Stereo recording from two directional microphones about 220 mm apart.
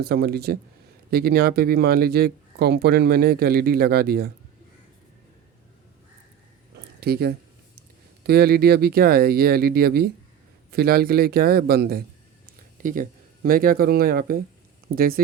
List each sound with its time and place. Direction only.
0.0 s speech: 45° right (ahead or behind)
7.0 s speech: 45° right (ahead or behind)